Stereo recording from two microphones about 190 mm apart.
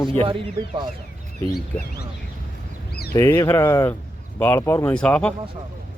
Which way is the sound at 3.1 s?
15° left (ahead or behind).